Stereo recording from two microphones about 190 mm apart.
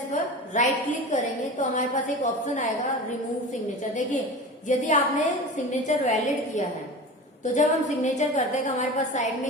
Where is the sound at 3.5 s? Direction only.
40° left (ahead or behind).